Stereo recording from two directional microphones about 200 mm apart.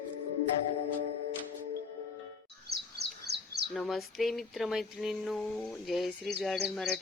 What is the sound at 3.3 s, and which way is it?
Bird, 55° right (ahead or behind).